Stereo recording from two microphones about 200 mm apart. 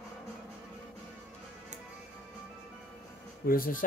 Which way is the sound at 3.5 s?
45° left (ahead or behind).